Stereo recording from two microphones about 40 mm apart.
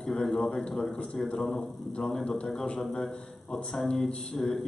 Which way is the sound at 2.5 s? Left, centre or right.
Centre.